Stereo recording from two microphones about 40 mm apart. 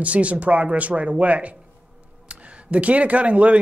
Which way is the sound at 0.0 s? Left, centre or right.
Right.